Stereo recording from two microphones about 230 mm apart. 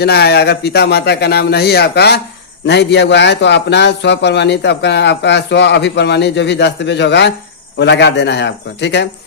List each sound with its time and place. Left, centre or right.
0.0 s a man's voice: left